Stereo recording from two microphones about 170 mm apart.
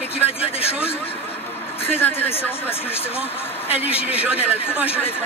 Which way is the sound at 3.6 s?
35° left (ahead or behind).